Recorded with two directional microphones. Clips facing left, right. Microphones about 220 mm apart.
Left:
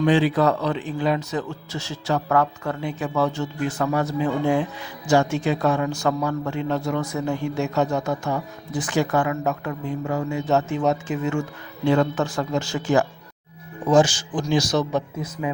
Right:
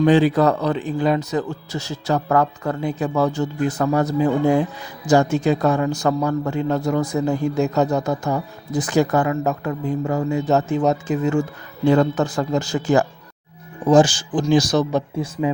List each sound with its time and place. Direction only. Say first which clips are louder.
0.0 s a man's voice: right 4 dB; 45° right (ahead or behind)